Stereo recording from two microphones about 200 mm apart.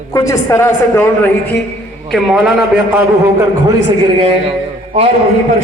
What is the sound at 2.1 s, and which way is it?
Speech, centre (ahead or behind).